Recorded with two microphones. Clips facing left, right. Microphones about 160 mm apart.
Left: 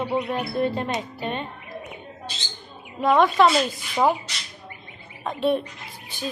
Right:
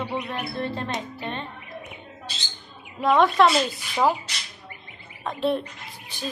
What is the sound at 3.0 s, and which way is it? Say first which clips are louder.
Speech: left 1 dB; centre (ahead or behind).